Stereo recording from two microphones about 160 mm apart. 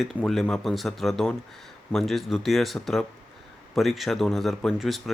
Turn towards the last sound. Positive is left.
turn(degrees=0)  # may be behind; listen again after turning